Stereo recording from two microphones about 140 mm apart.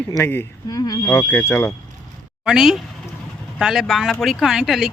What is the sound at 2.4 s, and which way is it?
Speech, 5° right (ahead or behind).